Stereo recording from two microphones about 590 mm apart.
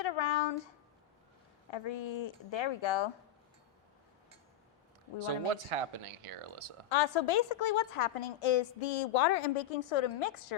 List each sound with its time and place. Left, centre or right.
0.0 s a sound: left
1.7 s a woman's voice: left
5.6 s speech: right
6.9 s a woman's voice: left